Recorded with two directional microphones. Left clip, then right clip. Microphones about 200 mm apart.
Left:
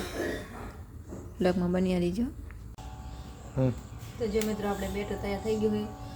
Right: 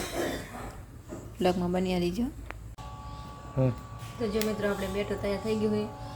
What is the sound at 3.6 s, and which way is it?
Speech, centre (ahead or behind).